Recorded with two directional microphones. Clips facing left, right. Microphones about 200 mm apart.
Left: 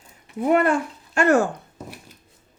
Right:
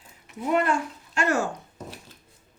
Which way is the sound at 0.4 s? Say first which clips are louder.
Left 5 dB; 55° left (ahead or behind).